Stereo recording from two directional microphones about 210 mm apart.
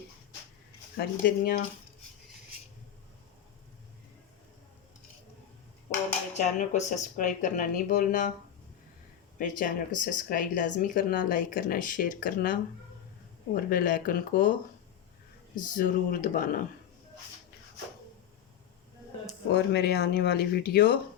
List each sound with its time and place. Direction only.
0.9 s speech: 45° left (ahead or behind)
6.3 s speech: 35° left (ahead or behind)
9.4 s speech: 40° left (ahead or behind)
13.7 s speech: 40° left (ahead or behind)
15.5 s speech: 40° left (ahead or behind)
19.5 s speech: 55° left (ahead or behind)